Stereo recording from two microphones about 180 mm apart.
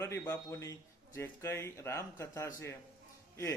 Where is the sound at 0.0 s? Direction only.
15° left (ahead or behind).